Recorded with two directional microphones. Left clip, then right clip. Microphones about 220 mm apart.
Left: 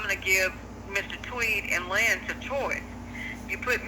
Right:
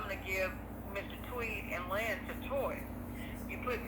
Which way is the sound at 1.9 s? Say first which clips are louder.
Left 12 dB; 45° left (ahead or behind).